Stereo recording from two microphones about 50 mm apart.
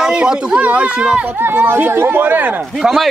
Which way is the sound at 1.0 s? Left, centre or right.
Centre.